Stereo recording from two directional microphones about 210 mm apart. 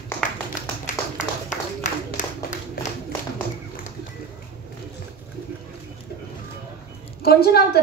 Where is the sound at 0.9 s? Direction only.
35° left (ahead or behind).